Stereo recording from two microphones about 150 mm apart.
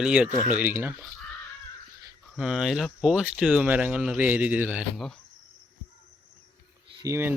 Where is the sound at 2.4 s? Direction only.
5° right (ahead or behind).